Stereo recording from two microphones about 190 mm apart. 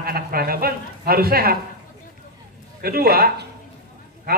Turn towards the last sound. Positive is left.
turn(degrees=-50)  # may be behind; listen again after turning